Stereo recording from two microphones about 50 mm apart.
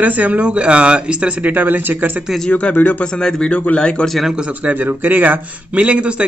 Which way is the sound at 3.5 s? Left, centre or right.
Left.